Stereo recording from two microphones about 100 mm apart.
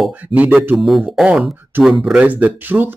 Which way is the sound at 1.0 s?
10° right (ahead or behind).